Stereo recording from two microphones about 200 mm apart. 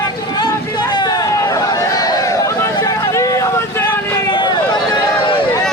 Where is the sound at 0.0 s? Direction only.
20° left (ahead or behind).